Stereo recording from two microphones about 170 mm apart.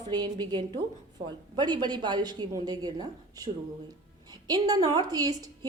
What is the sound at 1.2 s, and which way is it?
Speech, 40° right (ahead or behind).